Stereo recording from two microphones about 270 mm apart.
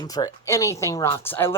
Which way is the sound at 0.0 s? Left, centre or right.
Centre.